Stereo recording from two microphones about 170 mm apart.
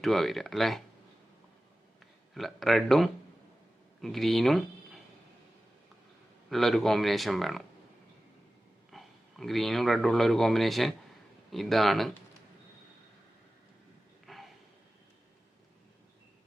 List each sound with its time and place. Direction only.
0.0 s speech: centre (ahead or behind)
2.3 s speech: centre (ahead or behind)
6.5 s speech: centre (ahead or behind)
8.9 s speech: centre (ahead or behind)
14.3 s gasp: centre (ahead or behind)